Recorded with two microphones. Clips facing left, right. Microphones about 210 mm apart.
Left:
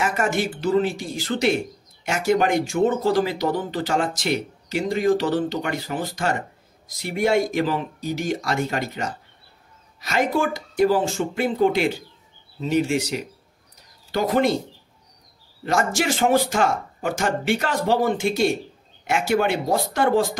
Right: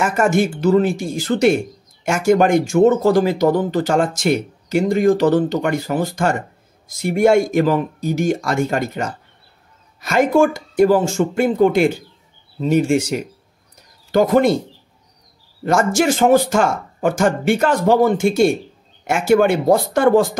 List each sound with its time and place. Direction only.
0.0 s speech: 45° right (ahead or behind)
15.6 s speech: 45° right (ahead or behind)